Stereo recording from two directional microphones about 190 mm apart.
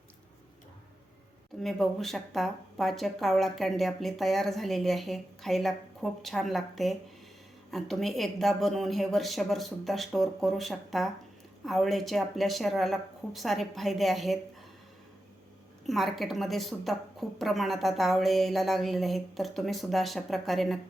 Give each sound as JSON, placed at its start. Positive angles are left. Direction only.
{"t": 1.6, "sound": "speech", "side_deg": 0}
{"t": 15.9, "sound": "speech", "side_deg": 0}